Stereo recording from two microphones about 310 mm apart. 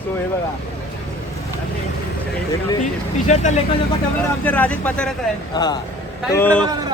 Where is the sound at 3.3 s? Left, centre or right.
Left.